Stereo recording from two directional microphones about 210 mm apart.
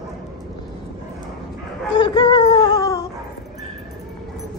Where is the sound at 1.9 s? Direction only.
20° left (ahead or behind).